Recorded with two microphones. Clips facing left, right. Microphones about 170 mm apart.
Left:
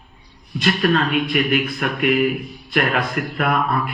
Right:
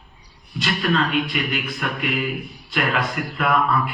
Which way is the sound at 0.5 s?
55° left (ahead or behind).